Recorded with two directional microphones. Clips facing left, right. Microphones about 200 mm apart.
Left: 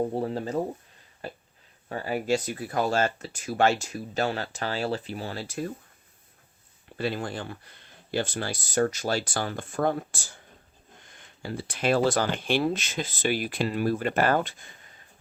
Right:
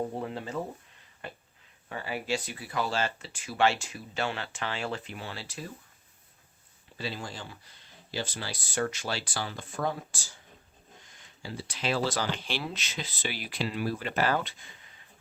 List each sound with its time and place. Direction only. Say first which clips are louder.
0.1 s speech: left 6 dB; 35° left (ahead or behind)
1.2 s a sound: left 4 dB; 35° left (ahead or behind)
1.9 s speech: left 6 dB; 40° left (ahead or behind)
6.9 s speech: left 7 dB; 55° left (ahead or behind)